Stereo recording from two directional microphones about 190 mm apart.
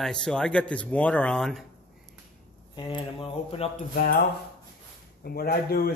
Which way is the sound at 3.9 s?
50° left (ahead or behind).